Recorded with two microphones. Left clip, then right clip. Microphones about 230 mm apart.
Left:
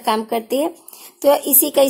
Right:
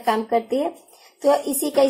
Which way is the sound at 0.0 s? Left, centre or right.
Left.